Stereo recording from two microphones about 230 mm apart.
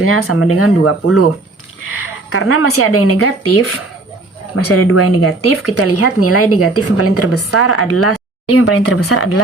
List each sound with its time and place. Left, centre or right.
0.0 s a woman's voice: left
4.5 s speech: left